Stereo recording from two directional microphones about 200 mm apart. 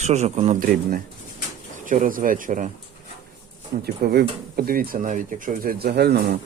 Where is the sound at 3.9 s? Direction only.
50° right (ahead or behind).